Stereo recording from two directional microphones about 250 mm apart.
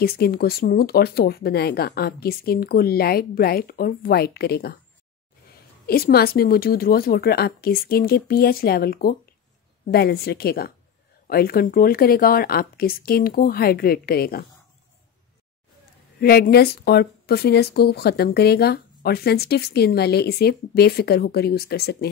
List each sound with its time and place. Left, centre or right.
0.0 s speech: left
5.9 s speech: left
16.2 s speech: left